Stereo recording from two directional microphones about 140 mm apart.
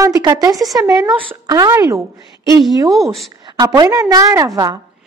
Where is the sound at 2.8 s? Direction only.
Centre (ahead or behind).